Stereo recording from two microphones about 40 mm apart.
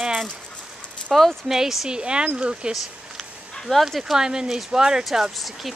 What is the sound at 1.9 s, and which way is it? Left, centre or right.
Speech, right.